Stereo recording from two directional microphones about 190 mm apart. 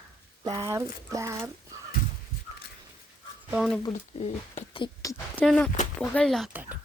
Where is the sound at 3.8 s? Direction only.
30° left (ahead or behind).